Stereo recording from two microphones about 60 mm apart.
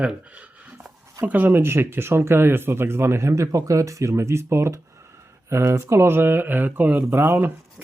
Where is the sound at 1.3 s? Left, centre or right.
Right.